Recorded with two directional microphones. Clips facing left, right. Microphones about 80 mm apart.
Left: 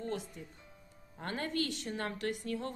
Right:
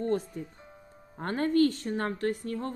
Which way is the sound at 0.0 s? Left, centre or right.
Right.